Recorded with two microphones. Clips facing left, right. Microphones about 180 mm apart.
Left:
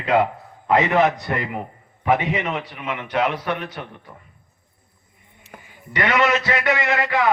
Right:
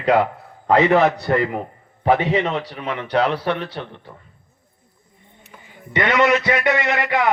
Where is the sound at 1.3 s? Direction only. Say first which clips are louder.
Right 6 dB; 35° right (ahead or behind).